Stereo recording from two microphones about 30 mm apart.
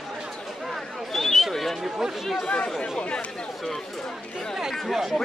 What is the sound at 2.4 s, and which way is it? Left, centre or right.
Speech, left.